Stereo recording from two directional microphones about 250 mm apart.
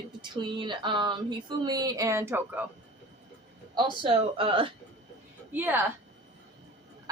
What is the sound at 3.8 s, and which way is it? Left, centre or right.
Speech, centre.